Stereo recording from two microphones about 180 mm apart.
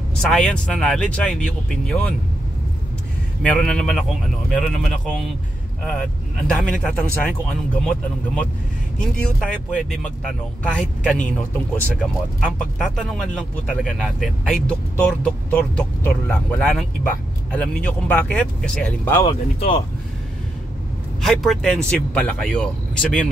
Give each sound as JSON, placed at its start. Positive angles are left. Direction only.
{"t": 0.2, "sound": "speech", "side_deg": 5}
{"t": 3.4, "sound": "speech", "side_deg": 5}
{"t": 6.4, "sound": "speech", "side_deg": 5}
{"t": 12.5, "sound": "speech", "side_deg": 0}
{"t": 19.2, "sound": "speech", "side_deg": 25}
{"t": 21.2, "sound": "speech", "side_deg": 0}